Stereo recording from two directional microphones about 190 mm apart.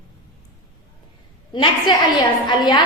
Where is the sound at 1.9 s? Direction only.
25° left (ahead or behind).